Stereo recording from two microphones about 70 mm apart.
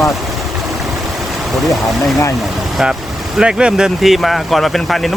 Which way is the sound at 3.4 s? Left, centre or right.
Centre.